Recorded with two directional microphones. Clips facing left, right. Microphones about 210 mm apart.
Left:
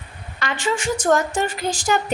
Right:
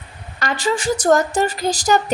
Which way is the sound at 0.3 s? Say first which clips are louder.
Right 3 dB; 40° right (ahead or behind).